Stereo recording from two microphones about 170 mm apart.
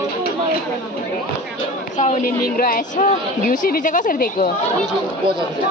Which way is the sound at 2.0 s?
50° left (ahead or behind).